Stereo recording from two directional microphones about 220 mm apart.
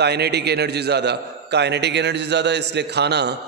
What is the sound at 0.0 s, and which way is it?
A man's voice, 50° right (ahead or behind).